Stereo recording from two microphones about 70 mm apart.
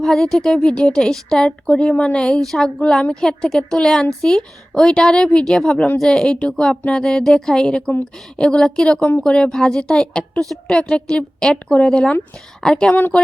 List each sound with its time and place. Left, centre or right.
0.0 s a woman's voice: centre
12.9 s speech: left